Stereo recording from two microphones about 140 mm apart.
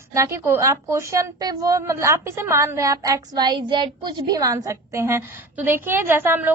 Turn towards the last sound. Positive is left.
turn(degrees=-15)  # may be behind; listen again after turning